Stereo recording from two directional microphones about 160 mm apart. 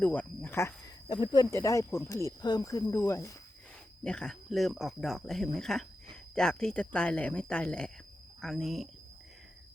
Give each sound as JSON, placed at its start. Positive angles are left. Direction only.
{"t": 0.0, "sound": "speech", "side_deg": 10}
{"t": 1.0, "sound": "speech", "side_deg": 25}
{"t": 4.0, "sound": "speech", "side_deg": 5}